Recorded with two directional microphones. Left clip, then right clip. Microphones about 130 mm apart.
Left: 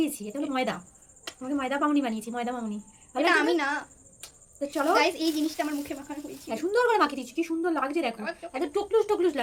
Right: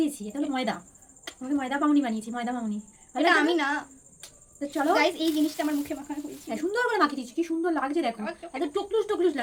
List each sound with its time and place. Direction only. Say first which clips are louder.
0.0 s speech: right 1 dB; 25° left (ahead or behind)
3.2 s a woman's voice: right 1 dB; centre (ahead or behind)
4.2 s a sound: left 2 dB; 25° left (ahead or behind)
4.9 s a woman's voice: even; centre (ahead or behind)
6.5 s speech: left 3 dB; 15° left (ahead or behind)
8.2 s a woman's voice: left 1 dB; 5° right (ahead or behind)
8.6 s speech: left 2 dB; 25° left (ahead or behind)